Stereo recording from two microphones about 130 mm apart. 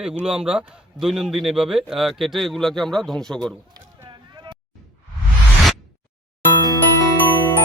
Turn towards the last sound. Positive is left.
turn(degrees=15)  # may be behind; listen again after turning